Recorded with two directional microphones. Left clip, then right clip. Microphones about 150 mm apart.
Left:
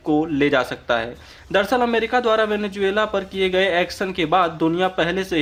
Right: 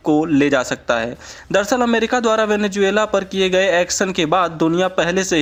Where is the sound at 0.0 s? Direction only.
45° right (ahead or behind).